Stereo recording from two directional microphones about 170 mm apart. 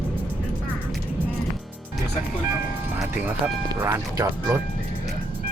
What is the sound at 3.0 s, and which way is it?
Speech, 15° right (ahead or behind).